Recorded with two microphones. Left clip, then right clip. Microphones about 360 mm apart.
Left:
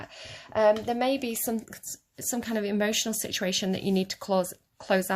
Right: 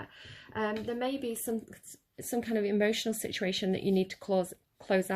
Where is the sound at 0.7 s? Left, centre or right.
Left.